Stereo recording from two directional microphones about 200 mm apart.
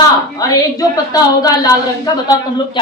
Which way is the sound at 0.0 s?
20° left (ahead or behind).